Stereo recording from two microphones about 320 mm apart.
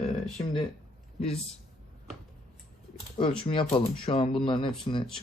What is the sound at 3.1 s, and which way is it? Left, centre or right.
Speech, centre.